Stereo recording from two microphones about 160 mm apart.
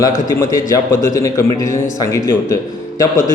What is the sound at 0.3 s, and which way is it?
A man's voice, 20° left (ahead or behind).